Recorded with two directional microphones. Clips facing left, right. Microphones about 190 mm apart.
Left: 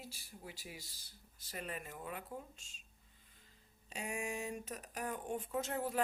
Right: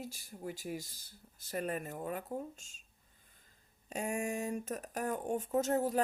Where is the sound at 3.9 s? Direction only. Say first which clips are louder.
Right 6 dB; 45° right (ahead or behind).